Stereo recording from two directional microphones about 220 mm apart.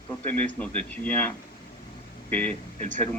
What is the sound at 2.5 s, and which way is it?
Speech, 30° right (ahead or behind).